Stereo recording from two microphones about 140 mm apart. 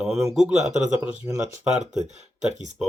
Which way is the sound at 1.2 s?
25° right (ahead or behind).